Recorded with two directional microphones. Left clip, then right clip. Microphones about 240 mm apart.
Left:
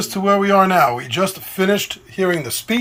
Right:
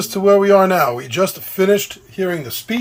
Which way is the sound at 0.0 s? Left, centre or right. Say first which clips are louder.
Right 4 dB; right.